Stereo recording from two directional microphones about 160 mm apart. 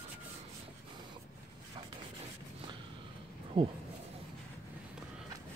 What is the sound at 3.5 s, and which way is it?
Speech, 35° right (ahead or behind).